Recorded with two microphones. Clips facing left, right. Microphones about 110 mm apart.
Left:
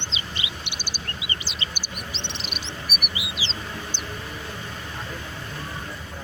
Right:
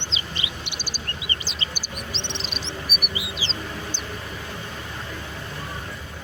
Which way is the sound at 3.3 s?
40° right (ahead or behind).